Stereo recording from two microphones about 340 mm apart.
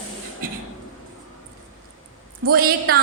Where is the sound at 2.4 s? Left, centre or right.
Right.